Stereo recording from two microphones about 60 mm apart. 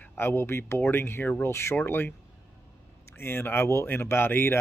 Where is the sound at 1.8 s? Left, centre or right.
Left.